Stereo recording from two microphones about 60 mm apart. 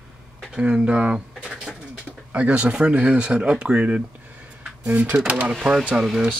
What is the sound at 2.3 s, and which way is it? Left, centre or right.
Speech, right.